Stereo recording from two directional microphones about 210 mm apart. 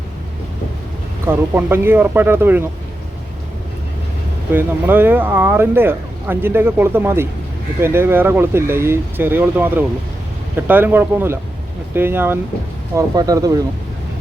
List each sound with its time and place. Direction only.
1.3 s speech: 10° right (ahead or behind)
4.5 s speech: 10° right (ahead or behind)